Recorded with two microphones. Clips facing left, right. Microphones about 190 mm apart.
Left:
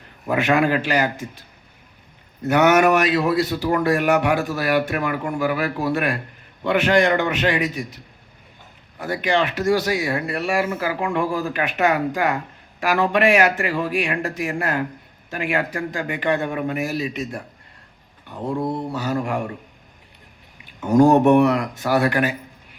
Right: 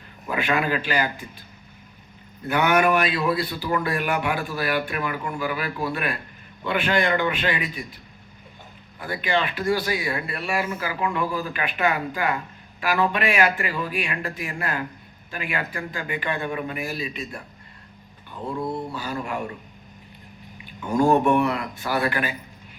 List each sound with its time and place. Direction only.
0.3 s speech: 70° left (ahead or behind)
2.5 s speech: 75° left (ahead or behind)
9.2 s speech: 80° left
18.3 s a sound: 60° left (ahead or behind)
18.9 s speech: 75° left (ahead or behind); by 19.5 s 55° left (ahead or behind)
21.3 s speech: 75° left (ahead or behind)